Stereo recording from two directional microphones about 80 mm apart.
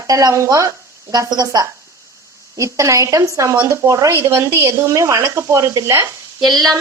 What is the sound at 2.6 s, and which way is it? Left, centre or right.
A woman's voice, right.